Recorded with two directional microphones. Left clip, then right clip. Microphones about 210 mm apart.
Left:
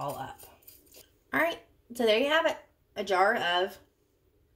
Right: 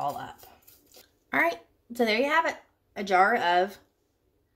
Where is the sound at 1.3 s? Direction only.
35° right (ahead or behind).